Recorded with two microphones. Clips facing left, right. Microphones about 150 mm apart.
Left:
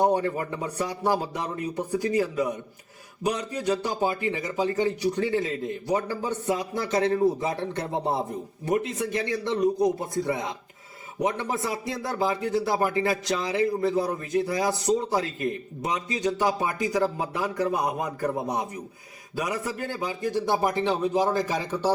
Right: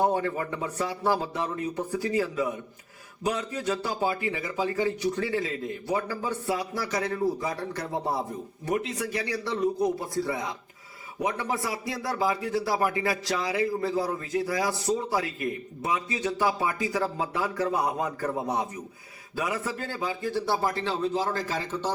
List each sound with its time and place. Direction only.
0.0 s a sound: 20° left (ahead or behind)
0.6 s a man's voice: 15° left (ahead or behind)
9.3 s a man's voice: 20° left (ahead or behind)